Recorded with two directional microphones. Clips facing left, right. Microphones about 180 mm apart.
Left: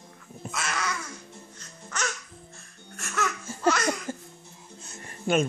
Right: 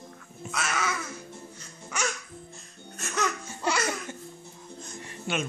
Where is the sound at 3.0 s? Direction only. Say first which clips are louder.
Right 1 dB; 20° right (ahead or behind).